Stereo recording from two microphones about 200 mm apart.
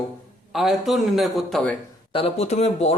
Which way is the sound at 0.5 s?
Centre (ahead or behind).